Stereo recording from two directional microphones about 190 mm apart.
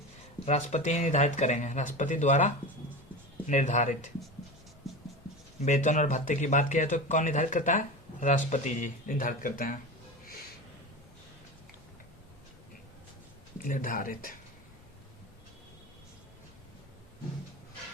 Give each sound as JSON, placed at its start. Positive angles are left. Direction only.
{"t": 0.4, "sound": "speech", "side_deg": 35}
{"t": 4.9, "sound": "scratch", "side_deg": 0}
{"t": 5.6, "sound": "speech", "side_deg": 40}
{"t": 13.6, "sound": "speech", "side_deg": 45}